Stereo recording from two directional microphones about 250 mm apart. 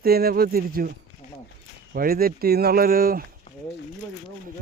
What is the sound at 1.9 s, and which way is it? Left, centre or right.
Speech, right.